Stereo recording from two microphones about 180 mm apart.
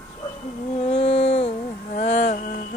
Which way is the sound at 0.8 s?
35° left (ahead or behind).